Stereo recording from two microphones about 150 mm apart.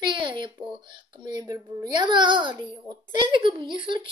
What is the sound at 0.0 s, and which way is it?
A child's voice, 30° right (ahead or behind).